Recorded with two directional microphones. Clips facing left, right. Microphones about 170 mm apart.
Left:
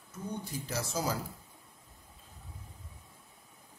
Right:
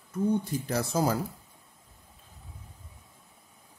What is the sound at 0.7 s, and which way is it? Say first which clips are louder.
Speech: right 7 dB; 55° right (ahead or behind).